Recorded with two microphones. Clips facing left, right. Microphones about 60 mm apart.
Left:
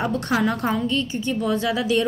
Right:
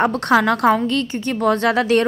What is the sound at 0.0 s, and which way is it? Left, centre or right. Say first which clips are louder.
A woman's voice: right 6 dB; right.